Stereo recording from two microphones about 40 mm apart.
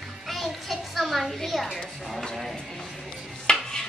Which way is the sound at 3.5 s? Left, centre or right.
Left.